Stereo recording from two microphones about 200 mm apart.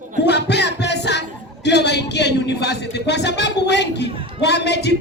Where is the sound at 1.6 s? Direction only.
55° left (ahead or behind).